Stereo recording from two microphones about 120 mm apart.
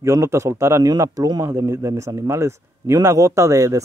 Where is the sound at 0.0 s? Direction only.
25° right (ahead or behind).